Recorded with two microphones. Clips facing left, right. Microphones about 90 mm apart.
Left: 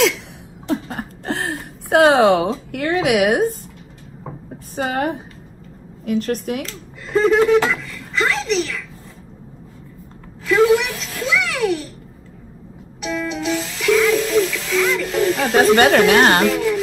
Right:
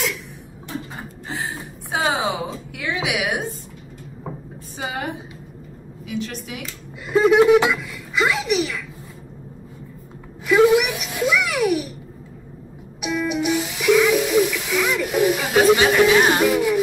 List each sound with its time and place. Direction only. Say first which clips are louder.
0.7 s a sound: left 9 dB; 80° left; by 2.5 s 65° left (ahead or behind)
2.7 s a woman's voice: left 7 dB; 50° left (ahead or behind)
4.7 s a woman's voice: left 7 dB; 40° left (ahead or behind)
6.6 s speech: left 3 dB; 10° right (ahead or behind)
10.4 s a child's voice: even; 10° right (ahead or behind)
13.0 s speech: right 1 dB; 10° right (ahead or behind)
15.9 s speech: left 3 dB; 65° left (ahead or behind)
16.4 s speech: even; 15° right (ahead or behind)